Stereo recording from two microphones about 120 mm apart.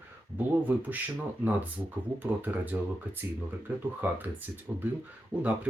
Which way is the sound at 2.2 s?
15° right (ahead or behind).